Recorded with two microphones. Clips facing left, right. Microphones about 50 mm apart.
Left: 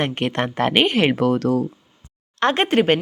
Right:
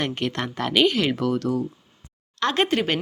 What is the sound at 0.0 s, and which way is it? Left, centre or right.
Speech, left.